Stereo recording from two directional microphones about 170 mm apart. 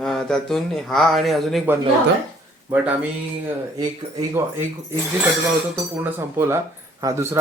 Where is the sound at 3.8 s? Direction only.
20° right (ahead or behind).